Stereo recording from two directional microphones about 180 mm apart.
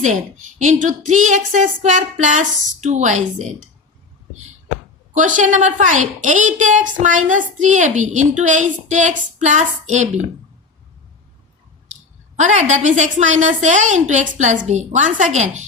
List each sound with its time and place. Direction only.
0.6 s a woman's voice: 45° right (ahead or behind)
5.1 s a woman's voice: 45° right (ahead or behind)
12.4 s a woman's voice: 40° right (ahead or behind)